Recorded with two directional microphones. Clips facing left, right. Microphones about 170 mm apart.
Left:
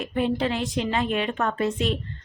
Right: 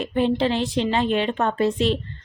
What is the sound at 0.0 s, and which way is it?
A woman's voice, 30° right (ahead or behind).